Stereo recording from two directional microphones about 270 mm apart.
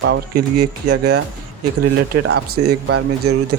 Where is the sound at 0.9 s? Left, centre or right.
Right.